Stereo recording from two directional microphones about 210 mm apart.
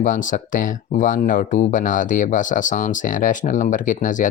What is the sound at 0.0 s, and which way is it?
Speech, 40° left (ahead or behind).